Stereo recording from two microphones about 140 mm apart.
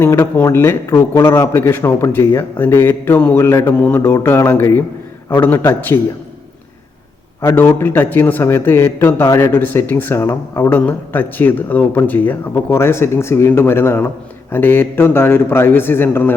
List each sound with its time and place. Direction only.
0.0 s a man's voice: 15° left (ahead or behind)
7.4 s a man's voice: 15° left (ahead or behind)